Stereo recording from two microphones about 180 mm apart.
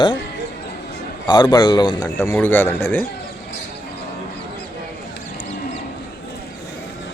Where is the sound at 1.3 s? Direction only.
25° left (ahead or behind).